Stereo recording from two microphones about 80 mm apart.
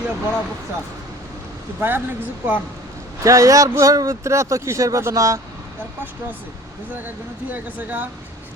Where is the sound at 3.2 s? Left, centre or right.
Right.